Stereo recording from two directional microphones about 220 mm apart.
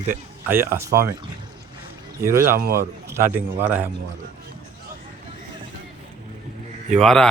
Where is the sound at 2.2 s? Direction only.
10° right (ahead or behind).